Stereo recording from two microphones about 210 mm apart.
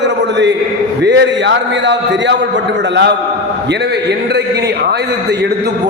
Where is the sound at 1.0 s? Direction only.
55° right (ahead or behind).